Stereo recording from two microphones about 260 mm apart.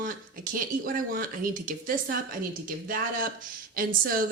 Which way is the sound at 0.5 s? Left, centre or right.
Right.